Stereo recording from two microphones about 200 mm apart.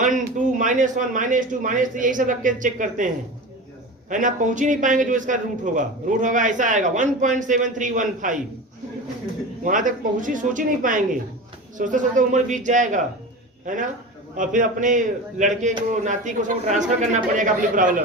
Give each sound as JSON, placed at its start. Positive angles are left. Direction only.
{"t": 0.0, "sound": "a man's voice", "side_deg": -40}
{"t": 4.1, "sound": "a man's voice", "side_deg": -40}
{"t": 9.6, "sound": "a man's voice", "side_deg": -40}